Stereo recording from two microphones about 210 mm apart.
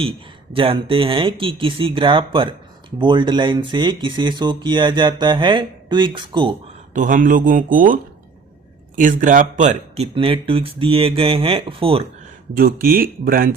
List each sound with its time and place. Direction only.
0.5 s speech: 25° right (ahead or behind)
6.9 s speech: 40° right (ahead or behind)
9.0 s speech: 40° right (ahead or behind)
12.5 s speech: 45° right (ahead or behind)